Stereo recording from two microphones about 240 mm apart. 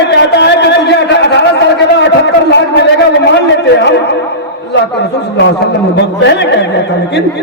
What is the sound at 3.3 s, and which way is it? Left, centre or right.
A man's voice, left.